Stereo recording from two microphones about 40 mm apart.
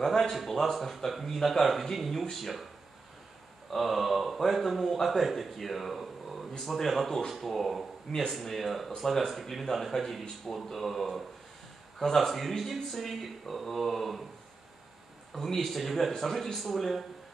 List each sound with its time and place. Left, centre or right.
0.1 s speech: centre
3.7 s speech: centre
15.3 s speech: centre